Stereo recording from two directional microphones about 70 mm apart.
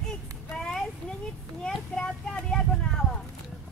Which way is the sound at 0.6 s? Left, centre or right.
Centre.